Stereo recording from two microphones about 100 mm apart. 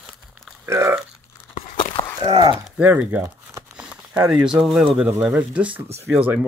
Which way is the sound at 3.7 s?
10° right (ahead or behind).